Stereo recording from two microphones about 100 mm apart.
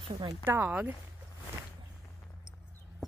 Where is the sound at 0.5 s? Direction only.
20° right (ahead or behind).